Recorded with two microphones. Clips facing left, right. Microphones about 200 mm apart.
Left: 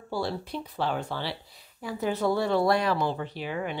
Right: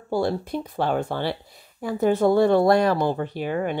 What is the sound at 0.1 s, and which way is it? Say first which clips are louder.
A woman's voice: right 7 dB; 50° right (ahead or behind).